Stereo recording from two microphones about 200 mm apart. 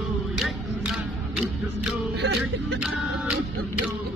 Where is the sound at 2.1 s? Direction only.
60° right (ahead or behind).